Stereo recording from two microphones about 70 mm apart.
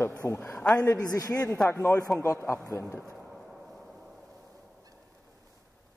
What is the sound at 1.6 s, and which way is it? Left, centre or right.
Speech, left.